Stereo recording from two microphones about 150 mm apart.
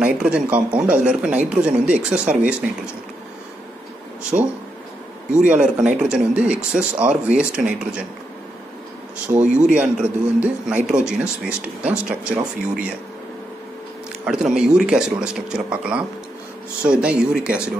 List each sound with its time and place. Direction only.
0.0 s speech: 10° right (ahead or behind)
4.2 s speech: 5° right (ahead or behind)
9.4 s speech: 50° right (ahead or behind)
9.7 s speech: 10° right (ahead or behind)
14.2 s speech: 5° right (ahead or behind)